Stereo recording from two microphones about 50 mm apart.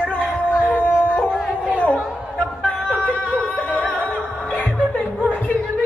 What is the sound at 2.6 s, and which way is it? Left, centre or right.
Music, left.